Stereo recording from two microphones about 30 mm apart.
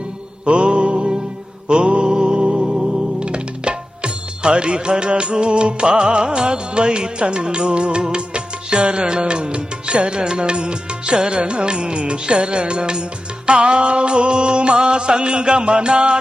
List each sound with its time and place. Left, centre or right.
0.4 s music: right